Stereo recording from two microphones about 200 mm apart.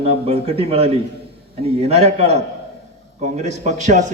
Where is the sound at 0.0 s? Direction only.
30° right (ahead or behind).